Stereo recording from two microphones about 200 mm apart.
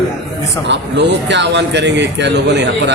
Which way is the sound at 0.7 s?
60° right (ahead or behind).